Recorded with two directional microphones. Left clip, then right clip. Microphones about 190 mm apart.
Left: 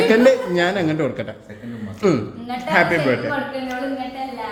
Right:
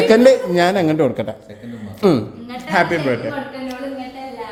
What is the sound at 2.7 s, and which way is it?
Speech, 20° right (ahead or behind).